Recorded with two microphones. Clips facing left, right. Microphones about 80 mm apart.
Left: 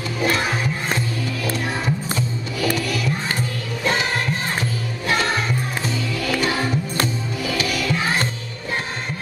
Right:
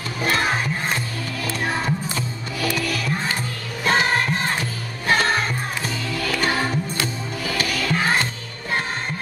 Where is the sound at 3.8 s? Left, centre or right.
Right.